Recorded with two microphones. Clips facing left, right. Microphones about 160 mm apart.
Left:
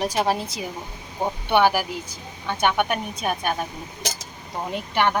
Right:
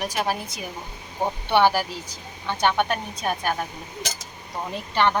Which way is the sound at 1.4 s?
15° left (ahead or behind).